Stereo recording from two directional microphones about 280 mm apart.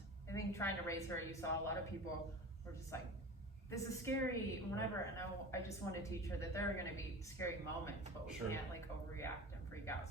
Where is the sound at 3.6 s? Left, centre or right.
Centre.